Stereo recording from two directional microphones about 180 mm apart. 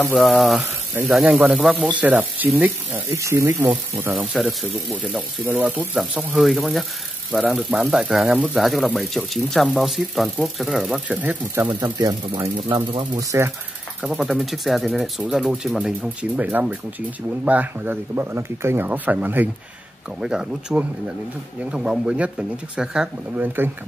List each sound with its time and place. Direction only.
0.0 s speech: 5° left (ahead or behind); by 3.7 s 15° right (ahead or behind)
4.1 s speech: centre (ahead or behind)
11.8 s speech: 20° right (ahead or behind)
14.0 s speech: centre (ahead or behind)